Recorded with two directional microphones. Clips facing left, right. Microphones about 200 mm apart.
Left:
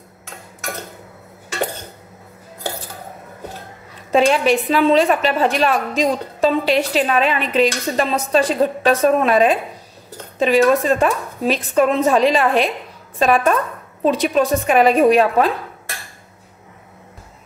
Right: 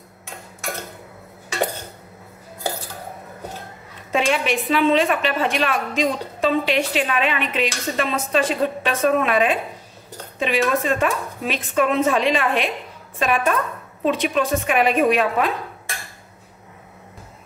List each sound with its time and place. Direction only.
4.1 s a woman's voice: 35° left (ahead or behind)